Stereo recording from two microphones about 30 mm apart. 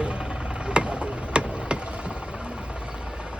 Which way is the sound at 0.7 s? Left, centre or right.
Right.